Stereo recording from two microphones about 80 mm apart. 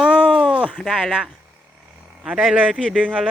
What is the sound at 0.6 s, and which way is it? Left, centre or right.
Speech, centre.